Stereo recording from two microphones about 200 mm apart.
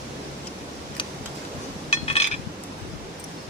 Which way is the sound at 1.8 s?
30° left (ahead or behind).